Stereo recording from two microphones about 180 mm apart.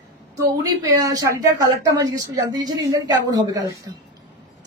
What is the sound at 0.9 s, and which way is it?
A woman's voice, 20° right (ahead or behind).